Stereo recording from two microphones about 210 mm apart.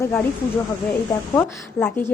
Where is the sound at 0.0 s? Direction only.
10° left (ahead or behind).